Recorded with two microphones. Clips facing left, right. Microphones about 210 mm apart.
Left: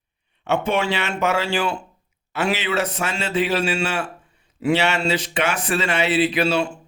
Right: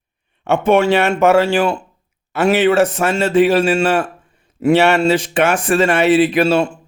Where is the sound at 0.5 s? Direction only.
50° right (ahead or behind).